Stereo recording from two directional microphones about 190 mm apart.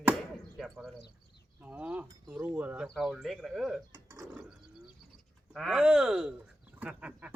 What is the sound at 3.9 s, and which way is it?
Speech, 15° right (ahead or behind).